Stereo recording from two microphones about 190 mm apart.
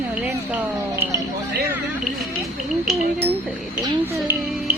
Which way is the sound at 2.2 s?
Centre (ahead or behind).